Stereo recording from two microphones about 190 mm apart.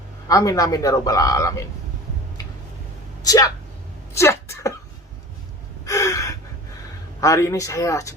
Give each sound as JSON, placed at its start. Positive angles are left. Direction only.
{"t": 0.3, "sound": "a man's voice", "side_deg": 15}
{"t": 3.2, "sound": "speech", "side_deg": 20}
{"t": 4.1, "sound": "a sound", "side_deg": 15}
{"t": 5.8, "sound": "gasp", "side_deg": 15}
{"t": 7.2, "sound": "a man's voice", "side_deg": 15}